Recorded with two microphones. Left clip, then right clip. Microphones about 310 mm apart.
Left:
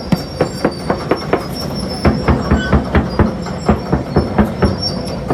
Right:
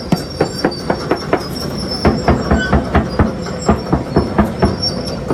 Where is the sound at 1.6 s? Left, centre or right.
Left.